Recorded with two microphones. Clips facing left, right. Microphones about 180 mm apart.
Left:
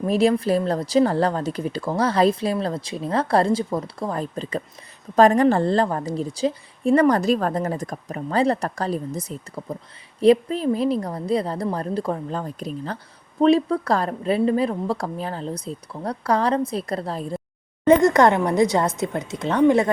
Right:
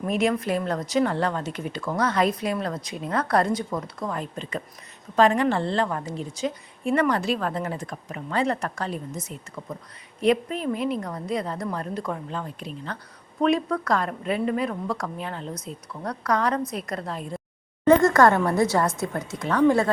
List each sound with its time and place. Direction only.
0.0 s speech: 30° left (ahead or behind)
17.8 s a woman's voice: 20° left (ahead or behind)